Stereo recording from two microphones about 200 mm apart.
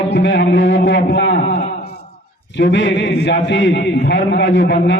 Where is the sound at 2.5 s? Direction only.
60° left (ahead or behind).